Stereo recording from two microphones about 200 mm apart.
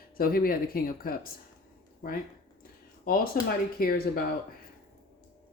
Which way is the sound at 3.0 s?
45° left (ahead or behind).